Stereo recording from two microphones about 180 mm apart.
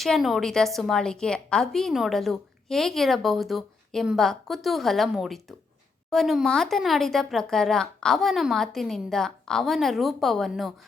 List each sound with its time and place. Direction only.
0.0 s a woman's voice: centre (ahead or behind)